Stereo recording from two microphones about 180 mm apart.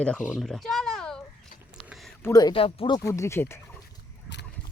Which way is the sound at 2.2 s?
20° left (ahead or behind).